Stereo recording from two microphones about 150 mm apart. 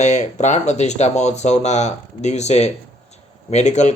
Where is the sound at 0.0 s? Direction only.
50° left (ahead or behind).